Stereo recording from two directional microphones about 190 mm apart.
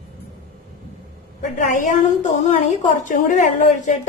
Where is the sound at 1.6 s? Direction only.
45° left (ahead or behind).